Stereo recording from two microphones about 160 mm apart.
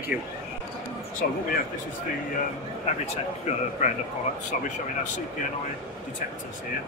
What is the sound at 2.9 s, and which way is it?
Speech, 45° left (ahead or behind).